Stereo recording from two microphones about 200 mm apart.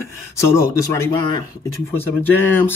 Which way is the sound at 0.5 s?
15° left (ahead or behind).